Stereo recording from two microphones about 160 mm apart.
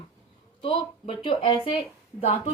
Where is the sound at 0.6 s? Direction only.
35° left (ahead or behind).